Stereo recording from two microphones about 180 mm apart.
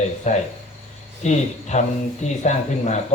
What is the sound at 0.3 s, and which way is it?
A man's voice, 40° left (ahead or behind).